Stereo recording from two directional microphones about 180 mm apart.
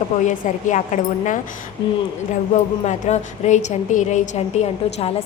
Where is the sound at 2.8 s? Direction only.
40° left (ahead or behind).